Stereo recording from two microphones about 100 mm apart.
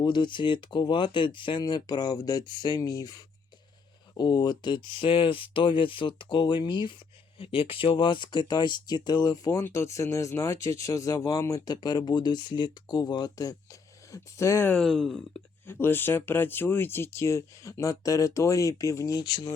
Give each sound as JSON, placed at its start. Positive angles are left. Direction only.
{"t": 0.0, "sound": "speech", "side_deg": 50}
{"t": 7.3, "sound": "speech", "side_deg": 65}
{"t": 14.8, "sound": "speech", "side_deg": 0}
{"t": 15.6, "sound": "speech", "side_deg": 20}